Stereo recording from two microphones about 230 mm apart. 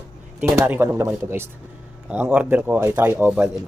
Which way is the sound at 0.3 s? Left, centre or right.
Centre.